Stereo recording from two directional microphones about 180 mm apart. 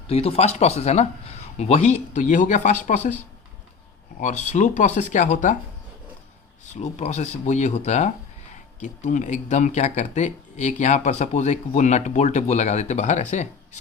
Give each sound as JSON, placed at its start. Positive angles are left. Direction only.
{"t": 0.1, "sound": "speech", "side_deg": 35}
{"t": 4.2, "sound": "speech", "side_deg": 40}
{"t": 6.7, "sound": "speech", "side_deg": 40}